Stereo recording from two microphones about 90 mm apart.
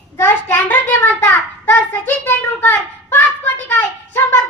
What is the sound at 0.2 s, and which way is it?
Child singing, 25° left (ahead or behind).